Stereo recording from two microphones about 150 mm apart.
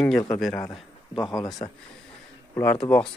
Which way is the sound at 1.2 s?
25° left (ahead or behind).